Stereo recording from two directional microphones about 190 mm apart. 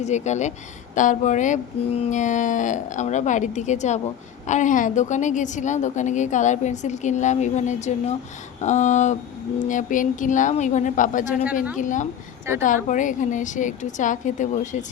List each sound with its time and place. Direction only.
0.0 s a woman's voice: 35° left (ahead or behind)